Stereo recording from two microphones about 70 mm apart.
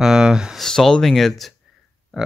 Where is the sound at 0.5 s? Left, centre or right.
Centre.